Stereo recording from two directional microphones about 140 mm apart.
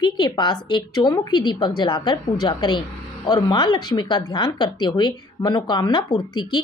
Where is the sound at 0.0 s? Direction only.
35° left (ahead or behind).